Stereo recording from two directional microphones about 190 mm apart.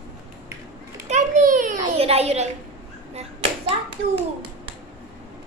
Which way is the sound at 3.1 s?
30° right (ahead or behind).